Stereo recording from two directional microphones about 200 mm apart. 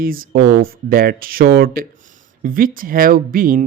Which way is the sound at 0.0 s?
45° right (ahead or behind).